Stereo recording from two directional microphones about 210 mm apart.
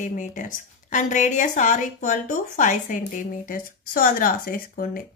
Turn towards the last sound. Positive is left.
turn(degrees=45)  # may be behind; listen again after turning